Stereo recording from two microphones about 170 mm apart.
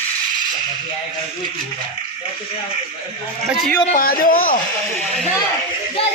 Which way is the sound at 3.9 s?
60° left (ahead or behind).